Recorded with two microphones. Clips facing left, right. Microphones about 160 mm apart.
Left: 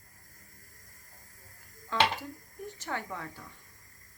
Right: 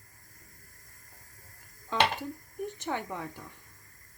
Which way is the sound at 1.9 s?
20° right (ahead or behind).